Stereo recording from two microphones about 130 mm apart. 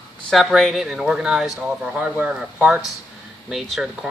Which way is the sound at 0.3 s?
Centre (ahead or behind).